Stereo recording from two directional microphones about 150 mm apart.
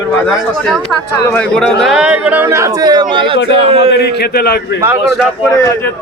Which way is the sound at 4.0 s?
90° left.